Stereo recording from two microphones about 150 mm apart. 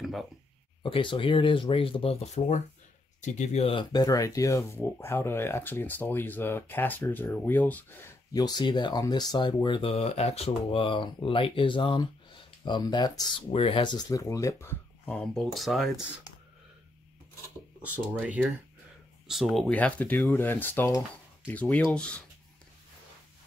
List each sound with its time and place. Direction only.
0.0 s a sound: centre (ahead or behind)
0.8 s speech: 35° left (ahead or behind); by 7.8 s 10° left (ahead or behind)
8.3 s speech: 25° left (ahead or behind)
9.8 s speech: 45° left (ahead or behind); by 13.2 s 30° left (ahead or behind)
13.5 s speech: 40° left (ahead or behind); by 14.8 s 20° left (ahead or behind)
15.0 s speech: centre (ahead or behind)
18.2 s speech: 10° right (ahead or behind); by 22.2 s 5° left (ahead or behind)